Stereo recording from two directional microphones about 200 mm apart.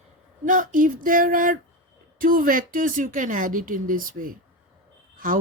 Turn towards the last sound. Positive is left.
turn(degrees=-45)  # may be behind; listen again after turning